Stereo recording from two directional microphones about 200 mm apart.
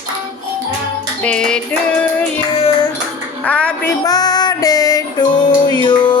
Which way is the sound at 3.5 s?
5° left (ahead or behind).